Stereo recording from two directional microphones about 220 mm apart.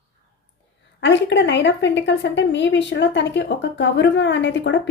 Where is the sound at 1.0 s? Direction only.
55° left (ahead or behind).